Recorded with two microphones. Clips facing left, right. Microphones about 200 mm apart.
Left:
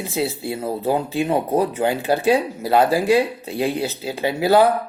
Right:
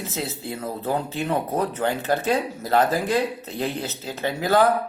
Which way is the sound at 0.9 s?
10° left (ahead or behind).